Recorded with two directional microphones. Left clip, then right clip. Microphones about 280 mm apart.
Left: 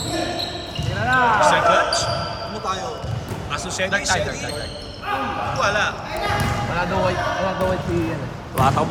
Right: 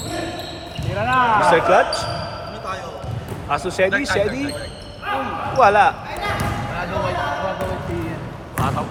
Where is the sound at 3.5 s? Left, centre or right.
Centre.